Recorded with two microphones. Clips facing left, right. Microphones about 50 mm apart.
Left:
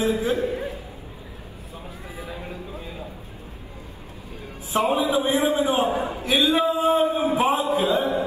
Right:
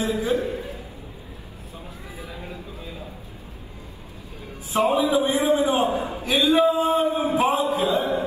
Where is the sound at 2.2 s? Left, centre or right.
Left.